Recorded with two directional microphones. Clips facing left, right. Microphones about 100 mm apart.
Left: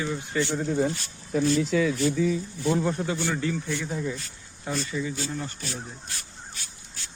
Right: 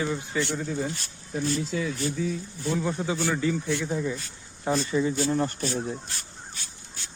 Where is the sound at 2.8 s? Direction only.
5° right (ahead or behind).